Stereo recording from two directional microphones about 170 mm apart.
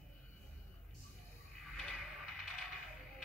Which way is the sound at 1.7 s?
Centre (ahead or behind).